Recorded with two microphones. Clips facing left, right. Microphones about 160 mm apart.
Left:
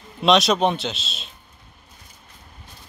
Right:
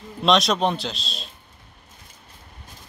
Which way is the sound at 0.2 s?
Centre (ahead or behind).